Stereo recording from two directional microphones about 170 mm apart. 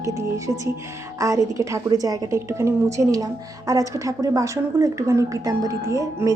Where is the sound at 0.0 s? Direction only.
20° right (ahead or behind).